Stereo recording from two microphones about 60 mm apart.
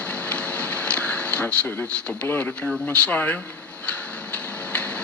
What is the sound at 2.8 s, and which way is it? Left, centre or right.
Speech, left.